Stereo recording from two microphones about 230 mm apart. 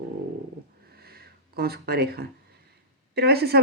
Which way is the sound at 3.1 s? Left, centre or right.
Right.